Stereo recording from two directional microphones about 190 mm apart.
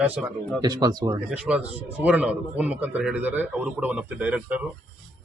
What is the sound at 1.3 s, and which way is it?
A man's voice, 5° right (ahead or behind).